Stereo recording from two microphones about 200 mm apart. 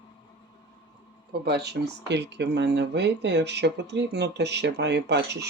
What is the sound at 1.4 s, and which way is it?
Speech, 55° right (ahead or behind).